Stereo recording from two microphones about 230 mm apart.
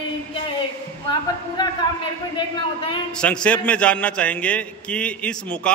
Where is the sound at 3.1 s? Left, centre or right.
Centre.